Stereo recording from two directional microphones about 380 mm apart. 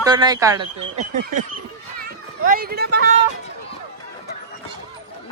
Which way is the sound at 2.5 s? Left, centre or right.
Right.